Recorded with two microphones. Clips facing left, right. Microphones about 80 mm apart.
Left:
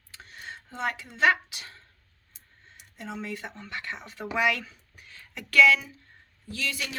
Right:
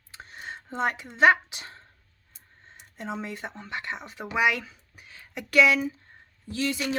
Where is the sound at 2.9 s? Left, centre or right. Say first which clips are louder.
Right 2 dB; right.